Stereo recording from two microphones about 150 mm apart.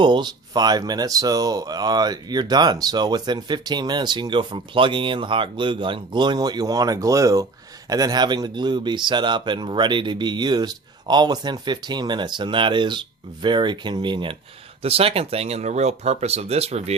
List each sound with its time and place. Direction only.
0.0 s speech: 30° right (ahead or behind); by 17.0 s 45° right (ahead or behind)